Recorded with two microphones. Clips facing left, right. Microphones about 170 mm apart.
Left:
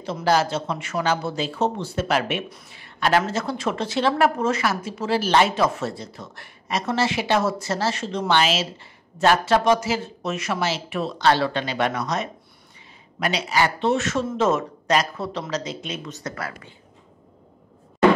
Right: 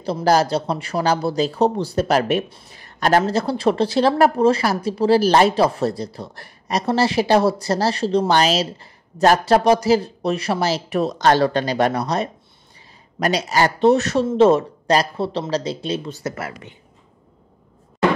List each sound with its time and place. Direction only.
0.0 s speech: 35° right (ahead or behind)